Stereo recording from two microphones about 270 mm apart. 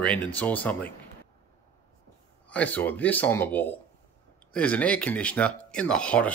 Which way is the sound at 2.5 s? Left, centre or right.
Centre.